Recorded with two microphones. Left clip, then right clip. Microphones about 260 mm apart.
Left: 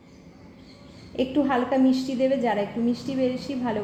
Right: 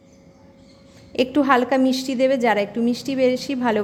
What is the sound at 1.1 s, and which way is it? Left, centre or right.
A woman's voice, right.